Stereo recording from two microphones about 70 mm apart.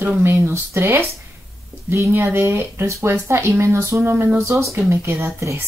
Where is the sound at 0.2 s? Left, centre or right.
Right.